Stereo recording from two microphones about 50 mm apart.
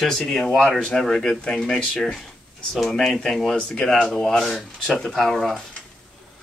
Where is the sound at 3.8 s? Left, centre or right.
Centre.